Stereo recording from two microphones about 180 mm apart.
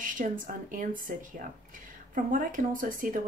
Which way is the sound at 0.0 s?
50° right (ahead or behind).